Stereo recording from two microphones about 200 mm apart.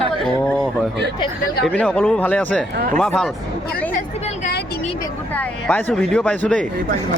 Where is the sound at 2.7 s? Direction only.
45° right (ahead or behind).